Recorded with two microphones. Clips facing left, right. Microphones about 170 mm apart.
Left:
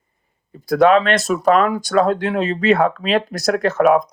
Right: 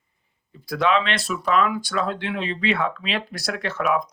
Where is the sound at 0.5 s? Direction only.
45° left (ahead or behind).